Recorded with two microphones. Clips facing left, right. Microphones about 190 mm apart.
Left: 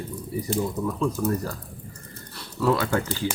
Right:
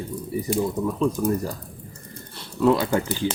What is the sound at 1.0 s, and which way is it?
Speech, 20° right (ahead or behind).